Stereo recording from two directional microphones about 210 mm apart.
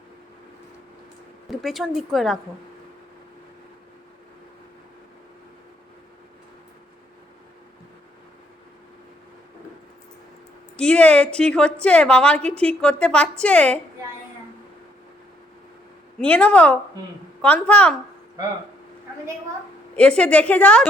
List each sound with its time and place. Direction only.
1.5 s a woman's voice: centre (ahead or behind)
10.8 s a woman's voice: 5° left (ahead or behind)
16.1 s a woman's voice: 5° left (ahead or behind)
20.0 s a woman's voice: 5° left (ahead or behind)